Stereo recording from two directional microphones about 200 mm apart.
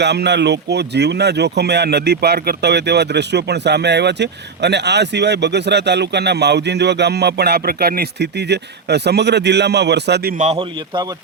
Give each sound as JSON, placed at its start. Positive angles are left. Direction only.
{"t": 0.0, "sound": "speech", "side_deg": -55}
{"t": 10.4, "sound": "a man's voice", "side_deg": -35}